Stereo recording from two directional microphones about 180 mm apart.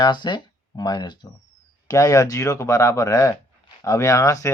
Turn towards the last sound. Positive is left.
turn(degrees=15)  # may be behind; listen again after turning